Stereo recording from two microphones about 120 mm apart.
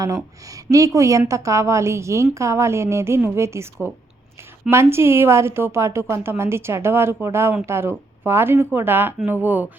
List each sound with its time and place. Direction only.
0.4 s a woman's voice: 30° right (ahead or behind)